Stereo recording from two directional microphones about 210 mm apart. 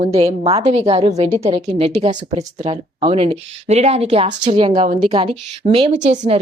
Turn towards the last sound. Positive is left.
turn(degrees=-35)  # may be behind; listen again after turning